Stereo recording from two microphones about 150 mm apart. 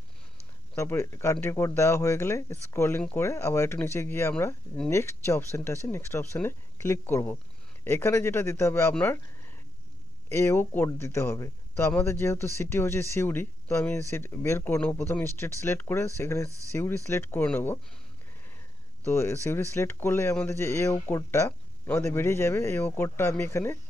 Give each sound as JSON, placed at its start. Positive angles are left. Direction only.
{"t": 0.7, "sound": "speech", "side_deg": 20}
{"t": 19.0, "sound": "speech", "side_deg": 15}